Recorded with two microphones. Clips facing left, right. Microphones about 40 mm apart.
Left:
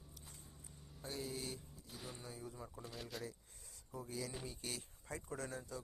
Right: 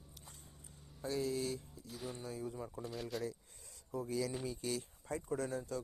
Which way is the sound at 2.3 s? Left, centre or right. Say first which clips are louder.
Right 7 dB; right.